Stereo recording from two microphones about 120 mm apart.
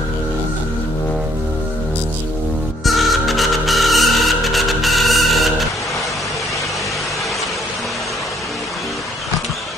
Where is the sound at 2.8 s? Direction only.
Centre (ahead or behind).